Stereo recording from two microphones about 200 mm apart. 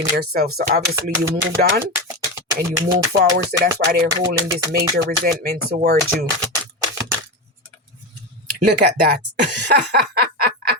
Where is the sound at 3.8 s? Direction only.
55° right (ahead or behind).